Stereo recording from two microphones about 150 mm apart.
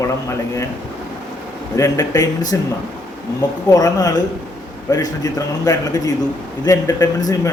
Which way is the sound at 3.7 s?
25° left (ahead or behind).